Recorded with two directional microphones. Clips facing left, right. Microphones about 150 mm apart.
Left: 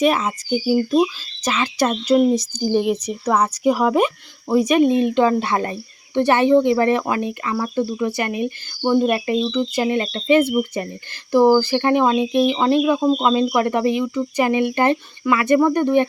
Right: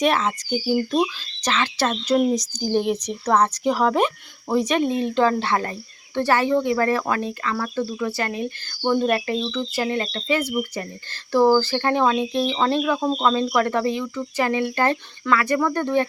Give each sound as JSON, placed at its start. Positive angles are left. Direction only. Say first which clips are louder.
{"t": 0.0, "sound": "speech", "louder": "left 2 dB", "side_deg": 10}